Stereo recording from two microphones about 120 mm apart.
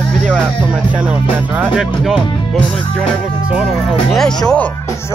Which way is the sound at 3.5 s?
Centre (ahead or behind).